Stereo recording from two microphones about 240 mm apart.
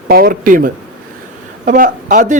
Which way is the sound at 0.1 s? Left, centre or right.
Right.